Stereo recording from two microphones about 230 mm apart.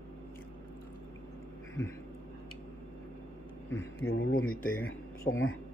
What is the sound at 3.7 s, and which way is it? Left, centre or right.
Speech, left.